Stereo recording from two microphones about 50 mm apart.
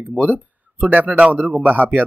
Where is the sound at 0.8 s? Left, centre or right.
Right.